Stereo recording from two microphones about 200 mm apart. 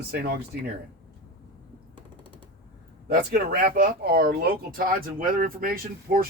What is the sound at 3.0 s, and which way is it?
Speech, 50° right (ahead or behind).